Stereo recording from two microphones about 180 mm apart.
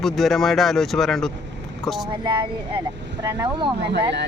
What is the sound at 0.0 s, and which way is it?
Speech, centre (ahead or behind).